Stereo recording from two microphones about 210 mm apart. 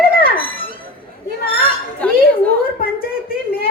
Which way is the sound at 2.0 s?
5° left (ahead or behind).